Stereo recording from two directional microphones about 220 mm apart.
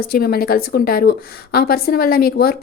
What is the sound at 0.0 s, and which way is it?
A woman's voice, 45° left (ahead or behind).